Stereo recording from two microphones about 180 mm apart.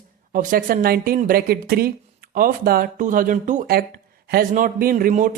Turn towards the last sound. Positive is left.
turn(degrees=-45)  # may be behind; listen again after turning